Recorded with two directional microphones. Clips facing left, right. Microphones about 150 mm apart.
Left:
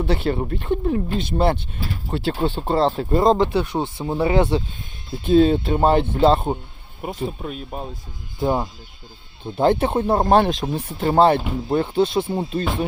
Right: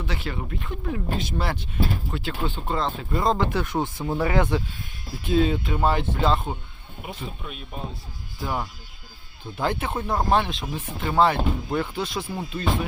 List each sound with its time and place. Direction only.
0.0 s speech: 30° left (ahead or behind)
7.0 s speech: 45° left (ahead or behind)
8.4 s speech: 25° left (ahead or behind)